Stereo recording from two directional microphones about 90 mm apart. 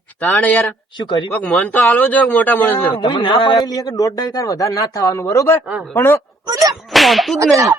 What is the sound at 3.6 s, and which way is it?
A man's voice, 45° left (ahead or behind).